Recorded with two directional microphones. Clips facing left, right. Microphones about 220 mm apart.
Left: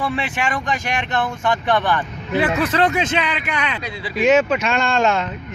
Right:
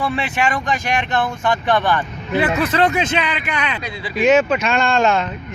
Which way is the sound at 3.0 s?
45° left (ahead or behind).